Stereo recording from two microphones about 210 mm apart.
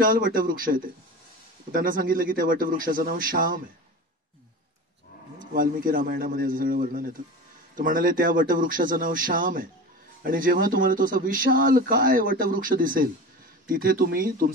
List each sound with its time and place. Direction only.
0.0 s speech: 40° right (ahead or behind)
5.5 s a man's voice: 40° right (ahead or behind)